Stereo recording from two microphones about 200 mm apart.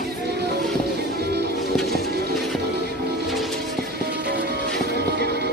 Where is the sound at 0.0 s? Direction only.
55° right (ahead or behind).